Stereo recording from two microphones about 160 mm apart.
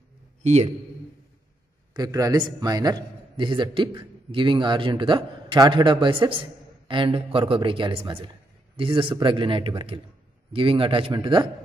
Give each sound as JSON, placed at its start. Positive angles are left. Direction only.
{"t": 0.4, "sound": "a man's voice", "side_deg": -45}
{"t": 2.0, "sound": "a man's voice", "side_deg": -20}